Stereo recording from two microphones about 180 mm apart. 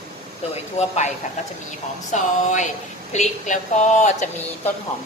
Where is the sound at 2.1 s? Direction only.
45° left (ahead or behind).